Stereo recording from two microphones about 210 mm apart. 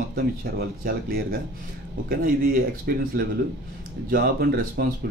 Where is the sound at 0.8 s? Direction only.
45° right (ahead or behind).